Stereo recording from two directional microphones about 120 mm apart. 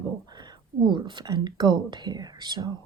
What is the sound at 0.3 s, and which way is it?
Speech, 35° right (ahead or behind).